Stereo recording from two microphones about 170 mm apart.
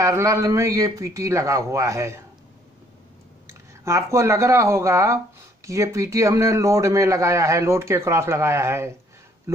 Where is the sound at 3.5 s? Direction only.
15° right (ahead or behind).